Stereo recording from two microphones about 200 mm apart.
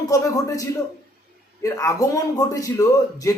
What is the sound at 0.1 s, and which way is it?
A man's voice, 15° left (ahead or behind).